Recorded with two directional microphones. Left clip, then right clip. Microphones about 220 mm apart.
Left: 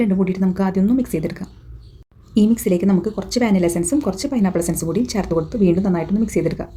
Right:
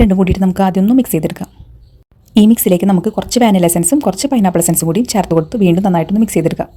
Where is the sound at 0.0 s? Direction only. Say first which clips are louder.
Right 7 dB; 35° right (ahead or behind).